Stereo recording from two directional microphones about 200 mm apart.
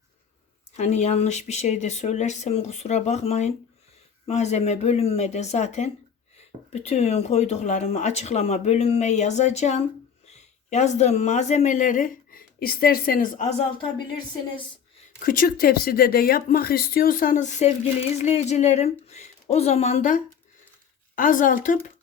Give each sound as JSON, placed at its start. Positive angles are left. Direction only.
{"t": 0.8, "sound": "speech", "side_deg": 35}
{"t": 15.2, "sound": "speech", "side_deg": 45}